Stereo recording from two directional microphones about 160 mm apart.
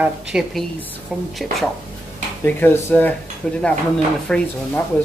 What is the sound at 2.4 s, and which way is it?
Speech, 10° left (ahead or behind).